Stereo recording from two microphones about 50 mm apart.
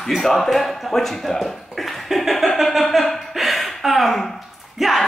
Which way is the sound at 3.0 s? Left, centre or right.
Centre.